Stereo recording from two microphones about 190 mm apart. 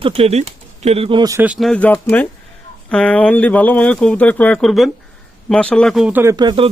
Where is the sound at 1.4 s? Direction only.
5° right (ahead or behind).